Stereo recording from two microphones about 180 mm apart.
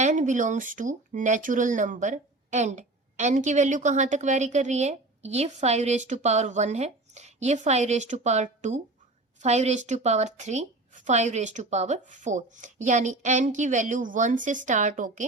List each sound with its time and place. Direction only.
0.0 s a woman's voice: 45° right (ahead or behind)